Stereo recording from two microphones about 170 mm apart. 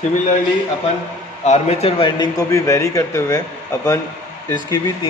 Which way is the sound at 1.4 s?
40° left (ahead or behind).